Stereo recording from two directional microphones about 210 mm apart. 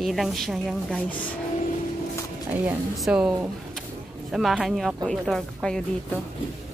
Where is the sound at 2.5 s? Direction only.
5° right (ahead or behind).